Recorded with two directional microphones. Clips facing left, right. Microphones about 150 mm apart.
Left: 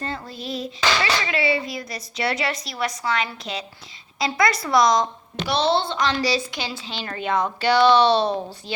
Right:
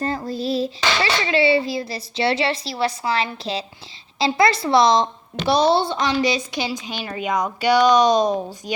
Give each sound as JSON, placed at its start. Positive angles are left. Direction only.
{"t": 0.0, "sound": "a child's voice", "side_deg": -35}
{"t": 5.6, "sound": "a woman's voice", "side_deg": -15}